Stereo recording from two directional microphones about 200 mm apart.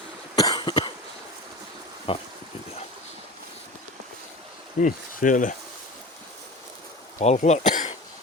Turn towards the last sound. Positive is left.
turn(degrees=35)  # may be behind; listen again after turning